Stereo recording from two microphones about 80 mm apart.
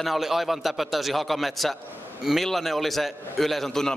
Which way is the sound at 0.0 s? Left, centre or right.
Centre.